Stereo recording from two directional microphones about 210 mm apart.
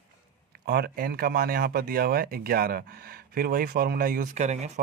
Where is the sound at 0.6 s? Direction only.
50° right (ahead or behind).